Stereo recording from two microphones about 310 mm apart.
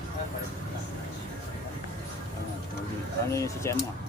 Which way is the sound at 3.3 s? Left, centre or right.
Centre.